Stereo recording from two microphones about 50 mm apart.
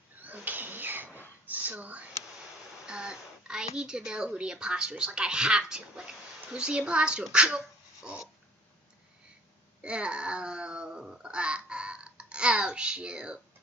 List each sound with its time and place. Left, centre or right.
0.2 s a sound: right
2.9 s a woman's voice: centre
9.8 s babbling: right